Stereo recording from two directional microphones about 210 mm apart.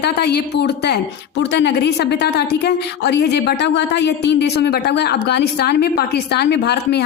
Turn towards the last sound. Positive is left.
turn(degrees=50)  # may be behind; listen again after turning